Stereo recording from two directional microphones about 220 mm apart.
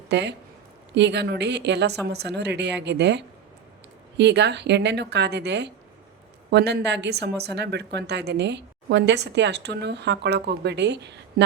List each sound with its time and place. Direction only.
0.1 s a woman's voice: 50° right (ahead or behind)